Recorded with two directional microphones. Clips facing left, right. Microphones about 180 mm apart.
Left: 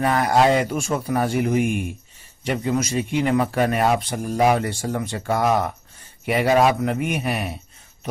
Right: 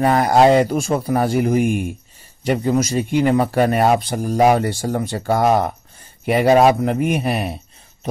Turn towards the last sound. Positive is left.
turn(degrees=-35)  # may be behind; listen again after turning